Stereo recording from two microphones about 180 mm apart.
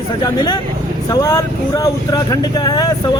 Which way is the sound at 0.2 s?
20° left (ahead or behind).